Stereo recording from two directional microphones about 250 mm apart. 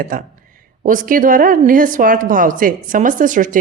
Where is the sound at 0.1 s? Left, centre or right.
Right.